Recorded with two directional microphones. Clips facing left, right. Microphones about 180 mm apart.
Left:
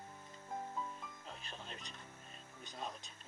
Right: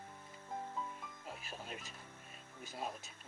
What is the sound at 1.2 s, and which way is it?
Music, 10° right (ahead or behind).